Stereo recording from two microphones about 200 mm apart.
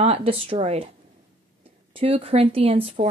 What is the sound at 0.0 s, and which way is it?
Speech, 30° right (ahead or behind).